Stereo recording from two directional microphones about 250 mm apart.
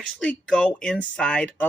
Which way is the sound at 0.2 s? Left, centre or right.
Centre.